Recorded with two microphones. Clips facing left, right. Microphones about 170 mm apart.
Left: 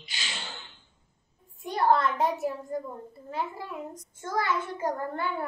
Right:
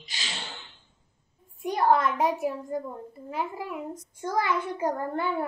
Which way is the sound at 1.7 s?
15° right (ahead or behind).